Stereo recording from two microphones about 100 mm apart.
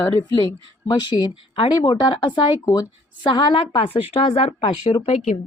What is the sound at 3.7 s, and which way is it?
Speech, 65° left (ahead or behind).